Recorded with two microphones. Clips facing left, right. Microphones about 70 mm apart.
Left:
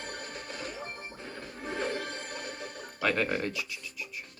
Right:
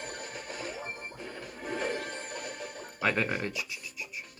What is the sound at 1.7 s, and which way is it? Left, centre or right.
Music, left.